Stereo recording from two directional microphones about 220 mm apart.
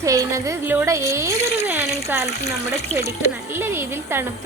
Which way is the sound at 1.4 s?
30° left (ahead or behind).